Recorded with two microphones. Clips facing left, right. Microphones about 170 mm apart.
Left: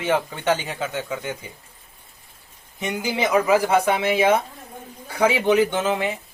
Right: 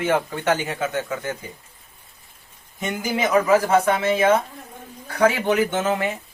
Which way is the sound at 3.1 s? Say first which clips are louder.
Right 1 dB; 20° left (ahead or behind).